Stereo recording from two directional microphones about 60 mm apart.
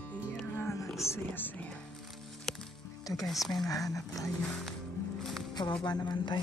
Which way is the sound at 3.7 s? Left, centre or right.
Left.